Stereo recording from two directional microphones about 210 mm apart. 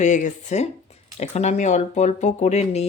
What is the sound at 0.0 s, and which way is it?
Speech, 35° left (ahead or behind).